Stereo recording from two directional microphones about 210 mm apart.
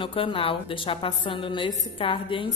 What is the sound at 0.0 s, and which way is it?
A woman's voice, 25° left (ahead or behind).